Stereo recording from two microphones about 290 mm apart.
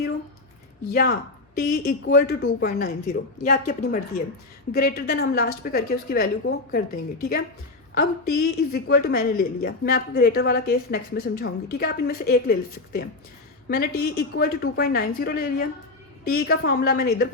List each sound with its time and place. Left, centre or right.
0.9 s a woman's voice: left